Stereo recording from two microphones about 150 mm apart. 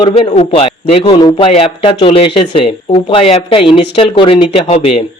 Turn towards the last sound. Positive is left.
turn(degrees=40)  # may be behind; listen again after turning